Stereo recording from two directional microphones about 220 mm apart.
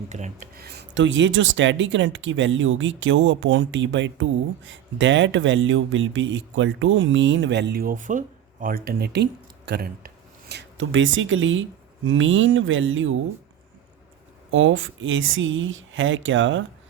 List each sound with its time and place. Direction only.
0.1 s speech: 35° right (ahead or behind)
10.5 s speech: 55° right (ahead or behind)
14.5 s speech: 65° right (ahead or behind)